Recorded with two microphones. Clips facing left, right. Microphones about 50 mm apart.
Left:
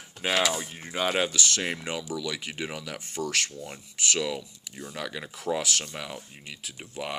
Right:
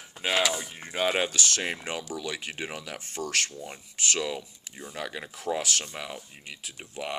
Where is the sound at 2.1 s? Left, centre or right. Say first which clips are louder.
Left 1 dB; right.